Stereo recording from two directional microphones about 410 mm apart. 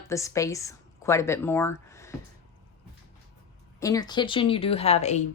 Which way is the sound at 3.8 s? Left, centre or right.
Centre.